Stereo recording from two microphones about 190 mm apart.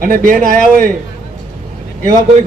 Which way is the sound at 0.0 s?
45° right (ahead or behind).